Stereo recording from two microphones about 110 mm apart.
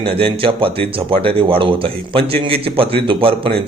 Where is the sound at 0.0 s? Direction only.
55° right (ahead or behind).